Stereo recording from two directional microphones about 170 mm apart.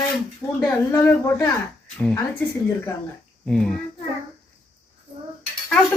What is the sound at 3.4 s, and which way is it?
Speech, 5° left (ahead or behind).